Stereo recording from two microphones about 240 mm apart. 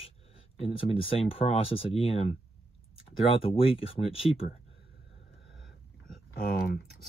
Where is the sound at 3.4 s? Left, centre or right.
Left.